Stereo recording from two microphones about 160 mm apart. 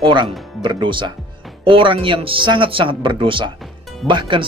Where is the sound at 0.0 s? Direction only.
30° right (ahead or behind).